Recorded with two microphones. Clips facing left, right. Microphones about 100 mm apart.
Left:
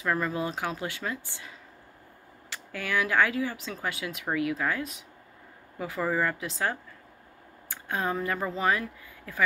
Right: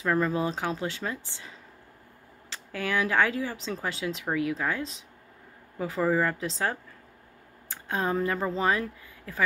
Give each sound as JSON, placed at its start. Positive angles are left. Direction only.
{"t": 0.0, "sound": "speech", "side_deg": -25}
{"t": 2.5, "sound": "speech", "side_deg": -25}